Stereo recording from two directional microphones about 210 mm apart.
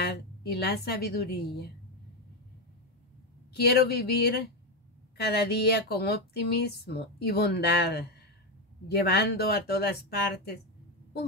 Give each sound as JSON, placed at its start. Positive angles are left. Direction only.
{"t": 0.0, "sound": "speech", "side_deg": 50}
{"t": 3.5, "sound": "speech", "side_deg": 50}